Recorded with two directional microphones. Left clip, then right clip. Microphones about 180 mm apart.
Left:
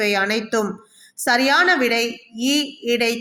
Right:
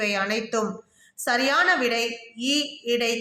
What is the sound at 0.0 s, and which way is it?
A woman's voice, 15° left (ahead or behind).